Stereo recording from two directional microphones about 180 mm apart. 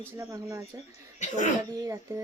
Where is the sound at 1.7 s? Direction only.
20° right (ahead or behind).